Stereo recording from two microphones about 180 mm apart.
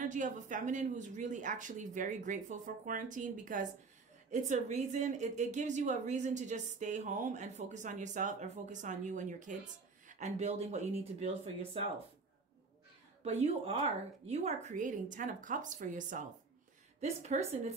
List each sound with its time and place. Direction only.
0.0 s a woman's voice: 45° right (ahead or behind)
13.2 s a woman's voice: 35° right (ahead or behind)